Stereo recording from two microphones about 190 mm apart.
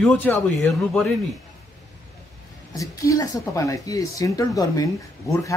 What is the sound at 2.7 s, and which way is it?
Speech, 20° left (ahead or behind).